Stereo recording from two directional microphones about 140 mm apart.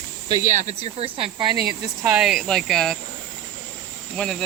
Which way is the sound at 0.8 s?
45° right (ahead or behind).